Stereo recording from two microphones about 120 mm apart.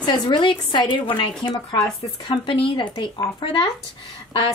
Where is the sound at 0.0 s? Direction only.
40° left (ahead or behind).